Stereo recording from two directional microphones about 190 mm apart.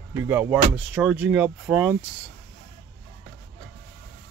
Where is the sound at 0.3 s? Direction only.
10° right (ahead or behind).